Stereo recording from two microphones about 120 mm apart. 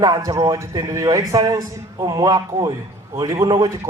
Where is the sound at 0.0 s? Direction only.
30° right (ahead or behind).